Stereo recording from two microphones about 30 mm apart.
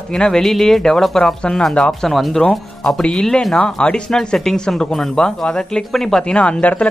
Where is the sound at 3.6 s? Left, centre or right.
Left.